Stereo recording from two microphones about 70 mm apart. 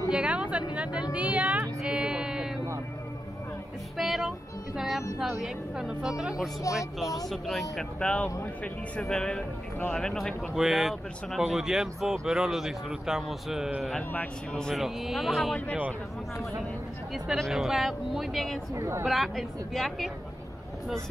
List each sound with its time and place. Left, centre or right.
0.1 s speech: centre
1.8 s a sound: centre
3.9 s music: centre
4.7 s a sound: centre
5.4 s speech: centre
8.0 s speech: centre
10.5 s speech: centre
14.1 s speech: centre
14.7 s speech: centre
17.1 s speech: centre
18.8 s a woman's voice: right
19.0 s speech: centre